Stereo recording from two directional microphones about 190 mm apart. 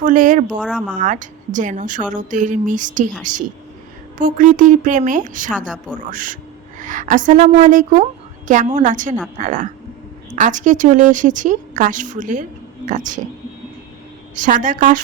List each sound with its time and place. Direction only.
0.0 s a woman's voice: 45° right (ahead or behind)
4.2 s a woman's voice: 45° right (ahead or behind)
5.5 s a woman's voice: 5° right (ahead or behind)
6.1 s a woman's voice: 45° right (ahead or behind)
14.3 s a woman's voice: 45° right (ahead or behind)